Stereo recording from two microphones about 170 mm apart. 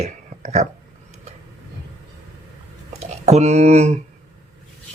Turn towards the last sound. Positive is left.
turn(degrees=-40)  # may be behind; listen again after turning